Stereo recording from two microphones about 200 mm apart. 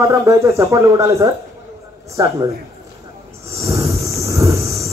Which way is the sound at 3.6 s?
15° right (ahead or behind).